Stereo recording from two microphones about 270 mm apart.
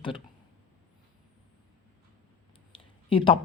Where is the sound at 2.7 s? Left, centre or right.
Centre.